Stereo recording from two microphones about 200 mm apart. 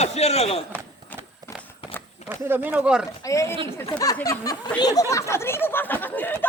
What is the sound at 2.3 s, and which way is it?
Speech, 10° right (ahead or behind).